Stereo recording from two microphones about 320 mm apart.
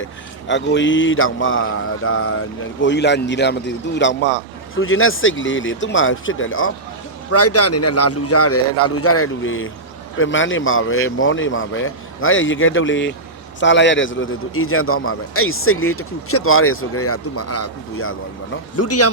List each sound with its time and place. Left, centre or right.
0.0 s a man's voice: left